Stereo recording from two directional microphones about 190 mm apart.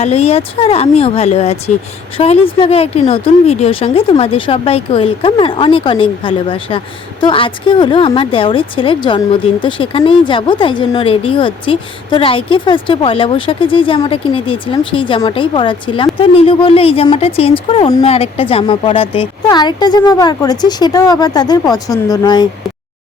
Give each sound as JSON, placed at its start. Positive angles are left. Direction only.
{"t": 0.0, "sound": "speech", "side_deg": 35}